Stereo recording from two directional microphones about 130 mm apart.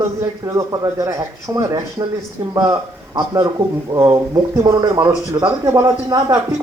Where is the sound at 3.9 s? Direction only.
25° right (ahead or behind).